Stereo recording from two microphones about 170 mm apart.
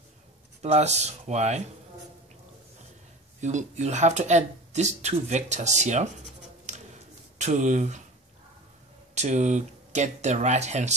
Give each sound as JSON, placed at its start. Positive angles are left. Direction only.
{"t": 0.6, "sound": "speech", "side_deg": -40}
{"t": 3.3, "sound": "speech", "side_deg": -45}
{"t": 9.1, "sound": "speech", "side_deg": -45}